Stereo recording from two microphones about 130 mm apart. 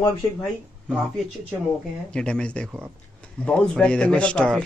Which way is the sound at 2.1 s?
5° left (ahead or behind).